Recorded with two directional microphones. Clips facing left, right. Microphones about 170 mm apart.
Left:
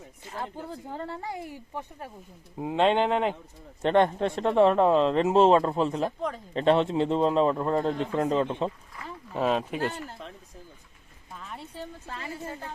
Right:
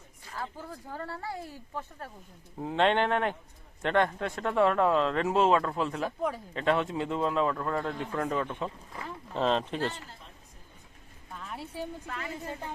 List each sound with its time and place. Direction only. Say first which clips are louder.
0.3 s speech: left 3 dB; 25° left (ahead or behind)
9.0 s speech: left 2 dB; 10° left (ahead or behind)
11.3 s a sound: right 1 dB; centre (ahead or behind)
12.0 s speech: even; 30° left (ahead or behind)